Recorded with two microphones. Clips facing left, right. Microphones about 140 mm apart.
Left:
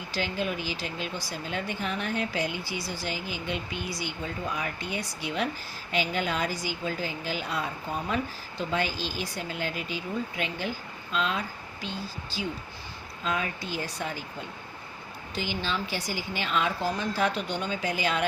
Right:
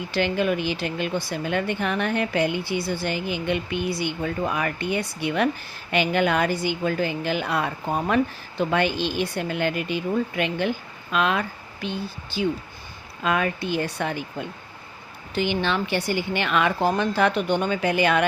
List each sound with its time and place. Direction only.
0.1 s a woman's voice: 60° right (ahead or behind)
15.4 s a woman's voice: 65° right (ahead or behind)